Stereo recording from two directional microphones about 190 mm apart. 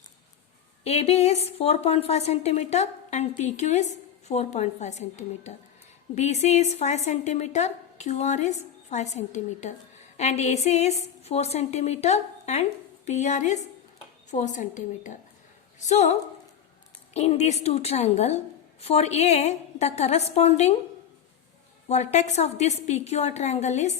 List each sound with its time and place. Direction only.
0.9 s a woman's voice: 35° left (ahead or behind)
21.8 s a woman's voice: 35° left (ahead or behind)